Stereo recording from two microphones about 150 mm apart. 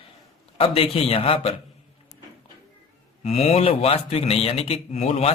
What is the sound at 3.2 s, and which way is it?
A man's voice, 45° left (ahead or behind).